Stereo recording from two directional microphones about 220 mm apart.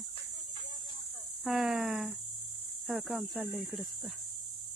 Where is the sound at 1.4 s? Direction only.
Centre (ahead or behind).